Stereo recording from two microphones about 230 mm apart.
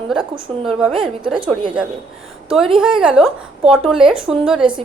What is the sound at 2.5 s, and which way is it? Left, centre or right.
A woman's voice, centre.